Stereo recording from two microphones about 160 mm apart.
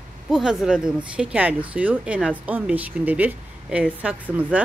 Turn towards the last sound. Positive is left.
turn(degrees=-10)  # may be behind; listen again after turning